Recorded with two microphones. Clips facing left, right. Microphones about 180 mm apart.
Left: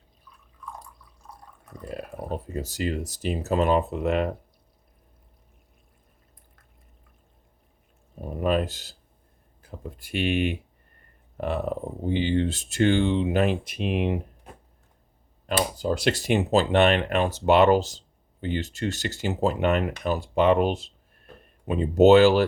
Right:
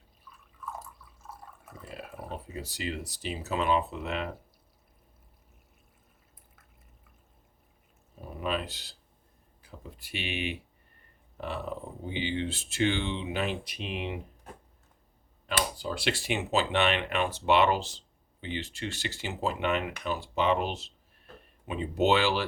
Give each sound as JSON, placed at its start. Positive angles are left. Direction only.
{"t": 0.3, "sound": "drip", "side_deg": -5}
{"t": 1.9, "sound": "a sound", "side_deg": 45}
{"t": 2.3, "sound": "speech", "side_deg": 45}
{"t": 8.2, "sound": "speech", "side_deg": 45}
{"t": 15.4, "sound": "speech", "side_deg": 45}